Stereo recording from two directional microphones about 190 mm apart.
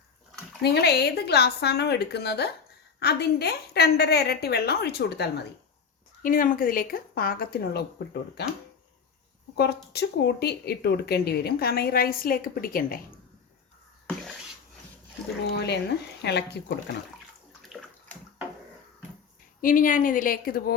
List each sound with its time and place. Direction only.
0.6 s speech: 60° left (ahead or behind)
6.2 s speech: 45° left (ahead or behind)
9.6 s speech: 60° left (ahead or behind)
15.5 s speech: 65° left (ahead or behind)
17.6 s bathtub: centre (ahead or behind)
19.6 s speech: 45° left (ahead or behind)